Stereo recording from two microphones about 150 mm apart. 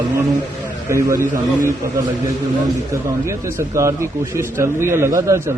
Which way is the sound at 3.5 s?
20° right (ahead or behind).